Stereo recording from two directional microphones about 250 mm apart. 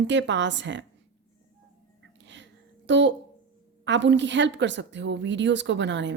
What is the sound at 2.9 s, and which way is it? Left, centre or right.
A woman's voice, right.